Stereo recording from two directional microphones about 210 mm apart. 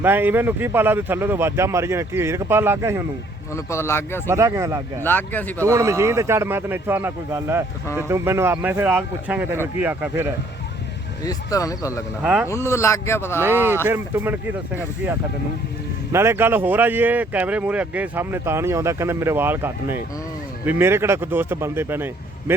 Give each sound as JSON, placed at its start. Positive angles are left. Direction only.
{"t": 0.0, "sound": "speech", "side_deg": -10}
{"t": 3.5, "sound": "speech", "side_deg": 10}
{"t": 4.3, "sound": "speech", "side_deg": -15}
{"t": 5.0, "sound": "speech", "side_deg": 10}
{"t": 5.5, "sound": "speech", "side_deg": -15}
{"t": 11.2, "sound": "speech", "side_deg": 15}
{"t": 12.2, "sound": "speech", "side_deg": -5}
{"t": 12.5, "sound": "speech", "side_deg": 15}
{"t": 13.4, "sound": "speech", "side_deg": -10}
{"t": 16.1, "sound": "speech", "side_deg": -10}